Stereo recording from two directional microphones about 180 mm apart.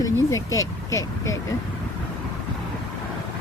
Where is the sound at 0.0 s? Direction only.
15° left (ahead or behind).